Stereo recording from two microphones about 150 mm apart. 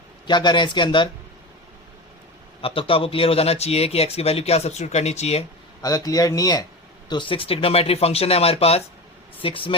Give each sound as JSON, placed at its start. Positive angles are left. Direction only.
{"t": 0.3, "sound": "speech", "side_deg": 30}
{"t": 2.6, "sound": "speech", "side_deg": 40}
{"t": 6.1, "sound": "speech", "side_deg": 25}